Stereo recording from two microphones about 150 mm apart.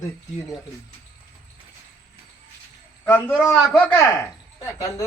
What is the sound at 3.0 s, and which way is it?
A man's voice, 15° left (ahead or behind).